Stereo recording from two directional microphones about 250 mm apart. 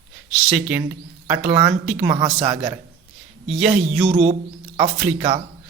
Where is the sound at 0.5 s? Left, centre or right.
Centre.